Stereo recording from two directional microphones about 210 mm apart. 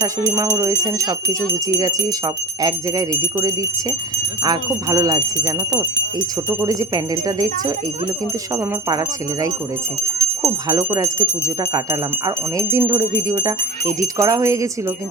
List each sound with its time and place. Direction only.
0.0 s speech: 15° right (ahead or behind)